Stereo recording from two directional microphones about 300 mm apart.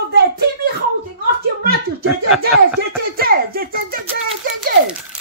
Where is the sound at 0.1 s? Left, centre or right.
Right.